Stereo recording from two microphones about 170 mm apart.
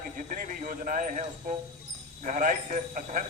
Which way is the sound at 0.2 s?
50° right (ahead or behind).